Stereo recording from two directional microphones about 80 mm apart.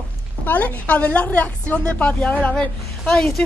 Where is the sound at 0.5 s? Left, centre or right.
Left.